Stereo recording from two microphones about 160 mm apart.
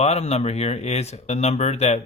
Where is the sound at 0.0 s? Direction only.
45° left (ahead or behind).